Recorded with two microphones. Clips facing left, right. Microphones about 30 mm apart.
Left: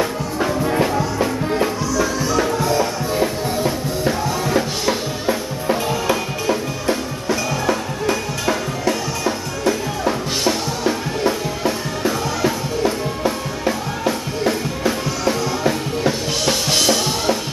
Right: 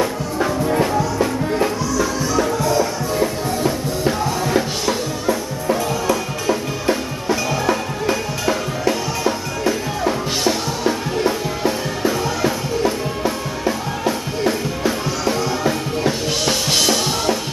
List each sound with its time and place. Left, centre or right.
0.0 s music: centre
3.6 s music: centre
5.2 s music: left
6.4 s music: centre